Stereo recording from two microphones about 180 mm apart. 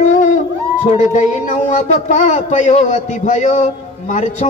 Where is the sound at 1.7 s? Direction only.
45° left (ahead or behind).